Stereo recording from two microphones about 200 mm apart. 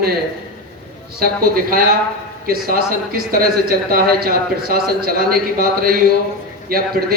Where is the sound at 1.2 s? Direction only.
45° right (ahead or behind).